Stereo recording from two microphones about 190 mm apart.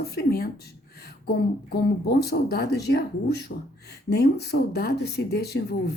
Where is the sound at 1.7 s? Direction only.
55° left (ahead or behind).